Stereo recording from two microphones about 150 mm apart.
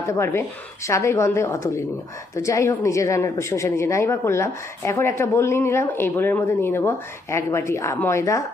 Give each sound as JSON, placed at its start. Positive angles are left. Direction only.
{"t": 0.1, "sound": "a woman's voice", "side_deg": 15}